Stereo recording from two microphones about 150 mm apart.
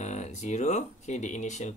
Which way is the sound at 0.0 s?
50° left (ahead or behind).